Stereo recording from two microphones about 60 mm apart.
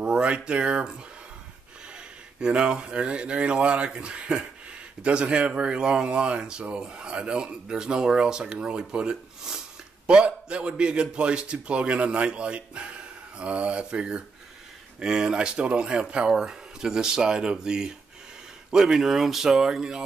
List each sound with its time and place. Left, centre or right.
0.0 s speech: centre